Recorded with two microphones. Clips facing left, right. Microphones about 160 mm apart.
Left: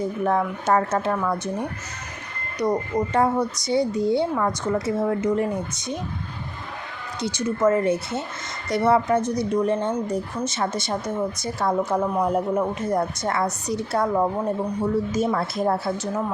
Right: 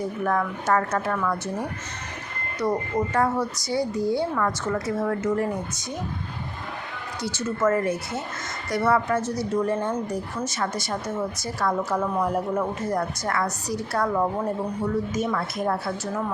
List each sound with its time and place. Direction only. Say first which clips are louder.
0.3 s speech: left 2 dB; 25° left (ahead or behind)
7.2 s speech: left 3 dB; 15° left (ahead or behind)
15.1 s speech: left 3 dB; 30° left (ahead or behind)